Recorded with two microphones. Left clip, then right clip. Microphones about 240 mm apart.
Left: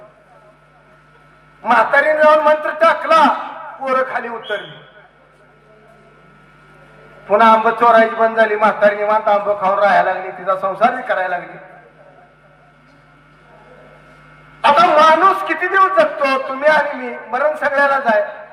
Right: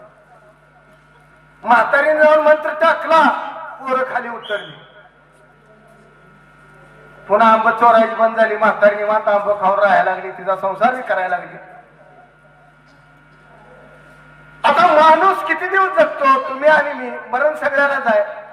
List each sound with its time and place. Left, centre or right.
1.6 s a man's voice: left
7.3 s a man's voice: left
14.6 s a man's voice: left